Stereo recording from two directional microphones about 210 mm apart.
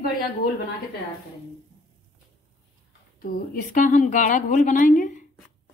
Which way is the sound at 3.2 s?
40° left (ahead or behind).